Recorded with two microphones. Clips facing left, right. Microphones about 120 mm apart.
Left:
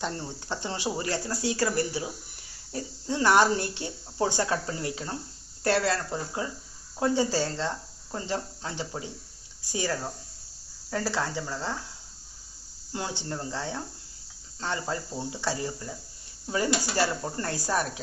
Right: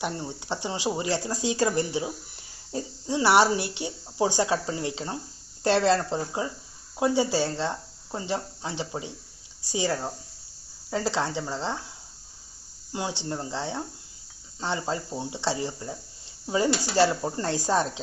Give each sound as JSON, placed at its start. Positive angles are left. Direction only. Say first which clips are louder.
{"t": 0.0, "sound": "speech", "louder": "right 2 dB", "side_deg": -15}
{"t": 12.9, "sound": "speech", "louder": "right 3 dB", "side_deg": -20}